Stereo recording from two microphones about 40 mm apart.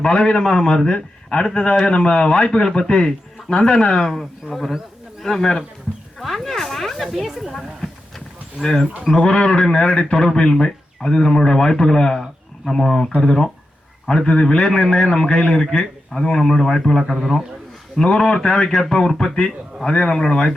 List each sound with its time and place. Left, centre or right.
0.0 s speech: left
4.1 s a man's voice: centre
6.1 s a sound: centre
9.1 s speech: left
10.2 s speech: centre